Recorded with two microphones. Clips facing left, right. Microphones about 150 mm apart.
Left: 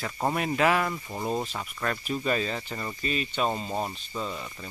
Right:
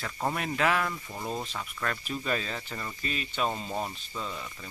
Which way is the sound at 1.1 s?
20° left (ahead or behind).